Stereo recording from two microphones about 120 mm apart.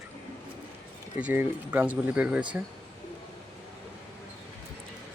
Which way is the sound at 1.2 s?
15° right (ahead or behind).